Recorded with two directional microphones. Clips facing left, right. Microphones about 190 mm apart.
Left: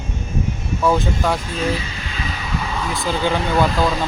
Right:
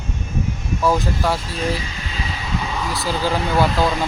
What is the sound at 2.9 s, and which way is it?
Speech, 5° right (ahead or behind).